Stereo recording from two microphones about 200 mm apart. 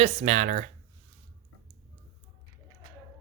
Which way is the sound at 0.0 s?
35° right (ahead or behind).